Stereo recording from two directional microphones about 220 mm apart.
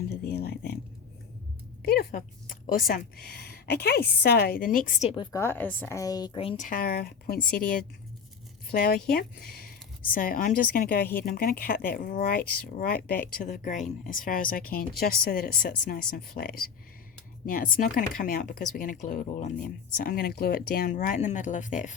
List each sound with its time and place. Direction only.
0.1 s a sound: 45° left (ahead or behind)
1.8 s speech: 45° left (ahead or behind); by 6.6 s 20° left (ahead or behind)
6.6 s a woman's voice: 40° left (ahead or behind)